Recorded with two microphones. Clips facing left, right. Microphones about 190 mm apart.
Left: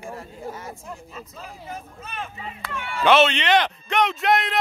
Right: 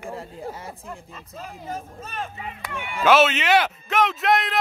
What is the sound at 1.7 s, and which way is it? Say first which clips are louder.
Speech: right 4 dB; 40° right (ahead or behind).